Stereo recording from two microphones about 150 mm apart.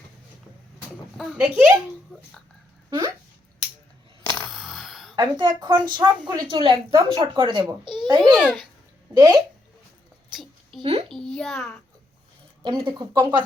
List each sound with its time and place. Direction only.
1.1 s speech: 5° right (ahead or behind)
4.5 s a sound: centre (ahead or behind)
5.1 s a woman's voice: 30° right (ahead or behind)
8.4 s speech: 5° right (ahead or behind)
9.1 s speech: 25° right (ahead or behind)
10.3 s a sound: centre (ahead or behind)
11.1 s a child's voice: centre (ahead or behind)
12.6 s speech: 30° right (ahead or behind)